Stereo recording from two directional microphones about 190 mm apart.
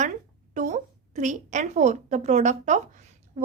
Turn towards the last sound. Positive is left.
turn(degrees=-40)  # may be behind; listen again after turning